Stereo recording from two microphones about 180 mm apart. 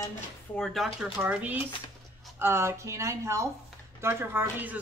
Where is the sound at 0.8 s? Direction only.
Centre (ahead or behind).